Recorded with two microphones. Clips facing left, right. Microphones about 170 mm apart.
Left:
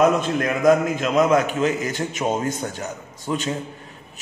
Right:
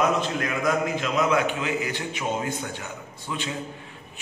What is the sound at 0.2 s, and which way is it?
A man's voice, 45° left (ahead or behind).